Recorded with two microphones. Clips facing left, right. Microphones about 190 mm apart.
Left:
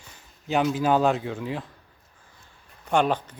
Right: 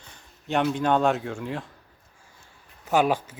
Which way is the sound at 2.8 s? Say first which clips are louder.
Right 1 dB; 5° right (ahead or behind).